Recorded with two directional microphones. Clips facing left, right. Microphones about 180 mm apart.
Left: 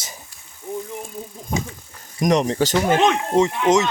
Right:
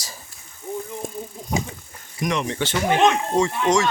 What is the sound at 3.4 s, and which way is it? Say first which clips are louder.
Speech: left 4 dB; 20° left (ahead or behind).